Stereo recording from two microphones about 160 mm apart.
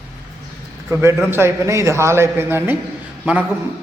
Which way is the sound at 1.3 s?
15° right (ahead or behind).